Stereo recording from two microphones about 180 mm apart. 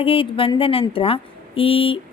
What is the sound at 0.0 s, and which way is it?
A woman's voice, 30° left (ahead or behind).